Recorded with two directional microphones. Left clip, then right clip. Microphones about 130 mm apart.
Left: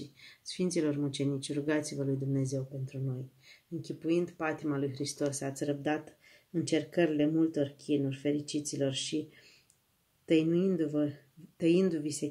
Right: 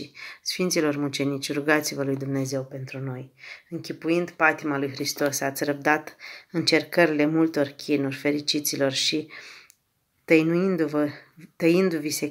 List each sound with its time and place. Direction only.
0.2 s speech: 25° left (ahead or behind)
4.0 s speech: 25° left (ahead or behind)